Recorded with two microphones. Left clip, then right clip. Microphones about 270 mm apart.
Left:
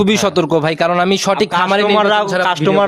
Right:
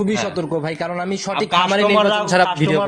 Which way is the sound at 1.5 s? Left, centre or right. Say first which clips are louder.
Right 1 dB; centre.